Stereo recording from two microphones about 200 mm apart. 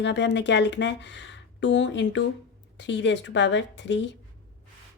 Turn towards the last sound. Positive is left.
turn(degrees=65)  # may be behind; listen again after turning